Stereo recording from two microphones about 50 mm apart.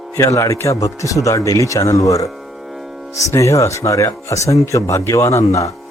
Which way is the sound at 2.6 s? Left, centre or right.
Centre.